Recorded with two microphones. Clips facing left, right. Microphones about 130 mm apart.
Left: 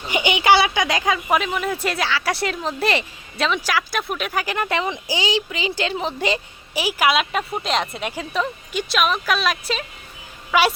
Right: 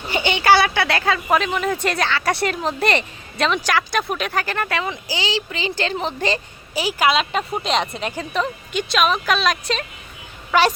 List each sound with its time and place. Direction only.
0.1 s a woman's voice: 15° left (ahead or behind)